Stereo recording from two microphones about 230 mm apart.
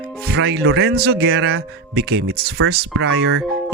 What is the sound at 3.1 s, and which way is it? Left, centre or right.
Speech, right.